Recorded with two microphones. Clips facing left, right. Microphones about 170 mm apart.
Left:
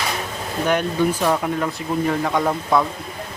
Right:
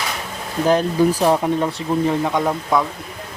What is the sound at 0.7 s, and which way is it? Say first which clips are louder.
Speech: right 4 dB; 35° right (ahead or behind).